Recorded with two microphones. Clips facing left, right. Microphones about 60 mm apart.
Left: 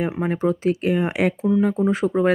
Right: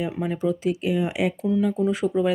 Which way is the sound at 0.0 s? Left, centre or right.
Left.